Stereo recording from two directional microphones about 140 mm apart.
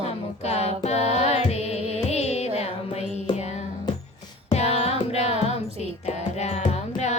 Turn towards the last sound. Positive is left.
turn(degrees=50)  # may be behind; listen again after turning